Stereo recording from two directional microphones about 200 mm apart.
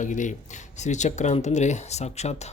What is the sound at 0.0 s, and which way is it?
Speech, 40° left (ahead or behind).